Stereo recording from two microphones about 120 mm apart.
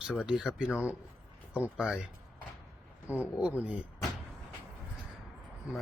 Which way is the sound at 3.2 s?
10° right (ahead or behind).